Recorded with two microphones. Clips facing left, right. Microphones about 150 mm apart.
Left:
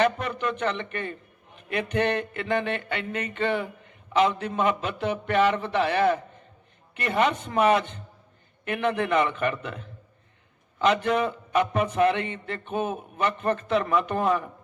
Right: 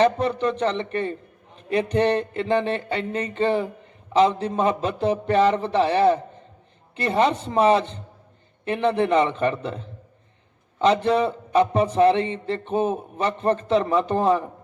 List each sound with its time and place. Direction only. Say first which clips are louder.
0.0 s a man's voice: right 5 dB; 30° right (ahead or behind)